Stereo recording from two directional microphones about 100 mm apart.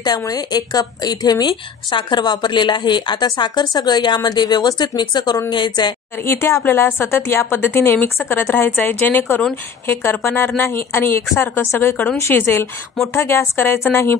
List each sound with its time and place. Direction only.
0.0 s a woman's voice: 40° left (ahead or behind)
1.5 s a woman's voice: 50° left (ahead or behind)
6.2 s a woman's voice: 25° left (ahead or behind)